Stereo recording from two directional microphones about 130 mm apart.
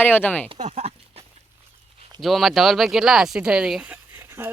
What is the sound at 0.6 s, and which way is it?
Speech, 60° right (ahead or behind).